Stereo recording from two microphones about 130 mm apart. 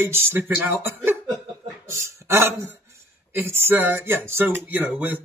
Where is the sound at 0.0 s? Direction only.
20° right (ahead or behind).